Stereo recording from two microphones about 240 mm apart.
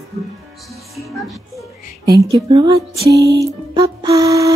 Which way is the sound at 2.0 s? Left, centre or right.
Centre.